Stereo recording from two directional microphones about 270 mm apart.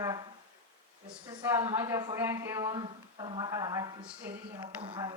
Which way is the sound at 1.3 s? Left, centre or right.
Centre.